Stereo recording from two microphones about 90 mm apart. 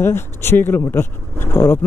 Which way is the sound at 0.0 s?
25° left (ahead or behind).